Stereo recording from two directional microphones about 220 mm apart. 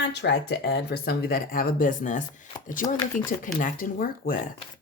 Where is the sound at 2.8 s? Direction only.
20° left (ahead or behind).